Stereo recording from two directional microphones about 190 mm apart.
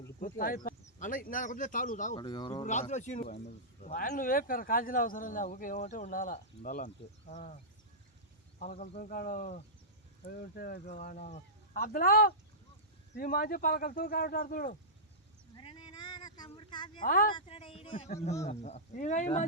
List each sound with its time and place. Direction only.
0.2 s speech: 45° left (ahead or behind)
2.1 s speech: 25° left (ahead or behind)
2.6 s speech: 40° left (ahead or behind)
15.5 s a sound: 25° left (ahead or behind)
17.0 s speech: 45° left (ahead or behind)
17.3 s speech: 30° left (ahead or behind)